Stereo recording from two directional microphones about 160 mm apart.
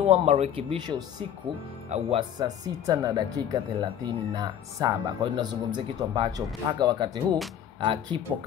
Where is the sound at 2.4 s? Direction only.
25° right (ahead or behind).